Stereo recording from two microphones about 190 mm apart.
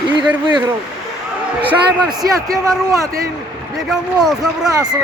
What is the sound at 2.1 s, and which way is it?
Speech, 20° right (ahead or behind).